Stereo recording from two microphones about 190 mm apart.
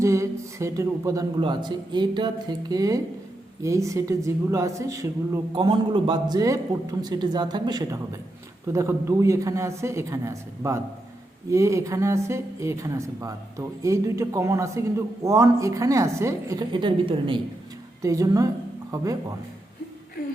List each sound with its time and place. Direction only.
0.0 s a woman's voice: 15° right (ahead or behind)